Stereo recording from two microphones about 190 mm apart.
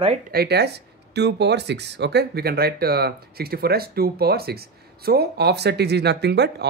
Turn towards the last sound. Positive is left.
turn(degrees=-60)  # may be behind; listen again after turning